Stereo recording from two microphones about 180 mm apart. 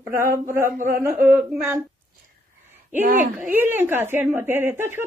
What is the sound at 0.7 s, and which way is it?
Speech, 50° right (ahead or behind).